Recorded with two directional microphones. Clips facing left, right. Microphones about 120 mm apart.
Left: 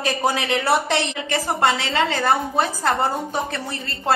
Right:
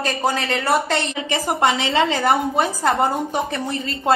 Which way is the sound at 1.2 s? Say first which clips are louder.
Right 2 dB; 15° right (ahead or behind).